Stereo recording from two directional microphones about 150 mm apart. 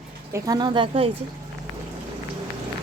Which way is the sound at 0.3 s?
25° right (ahead or behind).